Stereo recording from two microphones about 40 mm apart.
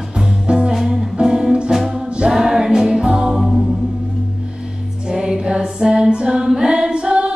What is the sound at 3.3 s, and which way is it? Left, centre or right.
Music, centre.